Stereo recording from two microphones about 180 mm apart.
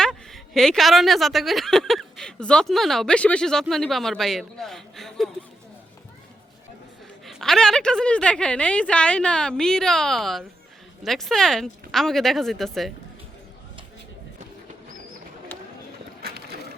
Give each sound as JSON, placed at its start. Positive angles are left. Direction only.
{"t": 0.0, "sound": "speech", "side_deg": 0}
{"t": 7.3, "sound": "speech", "side_deg": 0}
{"t": 16.2, "sound": "a sound", "side_deg": -60}